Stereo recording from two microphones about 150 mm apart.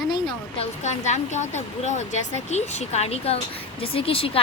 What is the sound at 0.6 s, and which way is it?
Speech, 50° left (ahead or behind).